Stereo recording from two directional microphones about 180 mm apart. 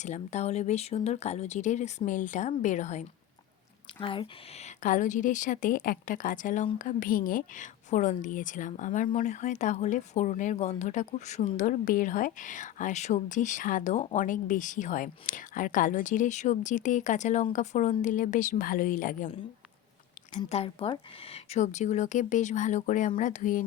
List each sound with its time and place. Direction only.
0.0 s speech: 40° left (ahead or behind)
4.0 s speech: 30° left (ahead or behind); by 19.3 s 50° left (ahead or behind)
20.5 s speech: 35° left (ahead or behind)